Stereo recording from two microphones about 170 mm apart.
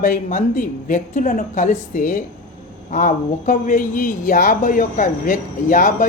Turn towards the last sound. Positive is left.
turn(degrees=50)  # may be behind; listen again after turning